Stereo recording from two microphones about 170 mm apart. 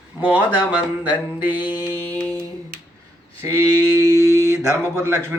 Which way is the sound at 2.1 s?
10° left (ahead or behind).